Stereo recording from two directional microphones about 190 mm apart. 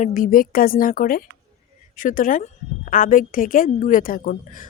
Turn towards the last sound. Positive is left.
turn(degrees=45)  # may be behind; listen again after turning